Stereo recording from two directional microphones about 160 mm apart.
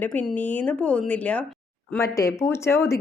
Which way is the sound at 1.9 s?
20° left (ahead or behind).